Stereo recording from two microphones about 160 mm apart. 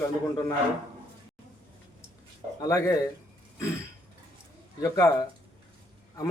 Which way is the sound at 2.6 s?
20° left (ahead or behind).